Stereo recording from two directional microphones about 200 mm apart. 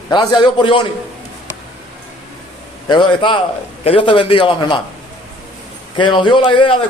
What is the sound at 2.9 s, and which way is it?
Speech, 25° left (ahead or behind).